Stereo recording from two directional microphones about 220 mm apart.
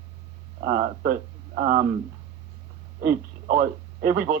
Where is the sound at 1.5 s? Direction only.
35° right (ahead or behind).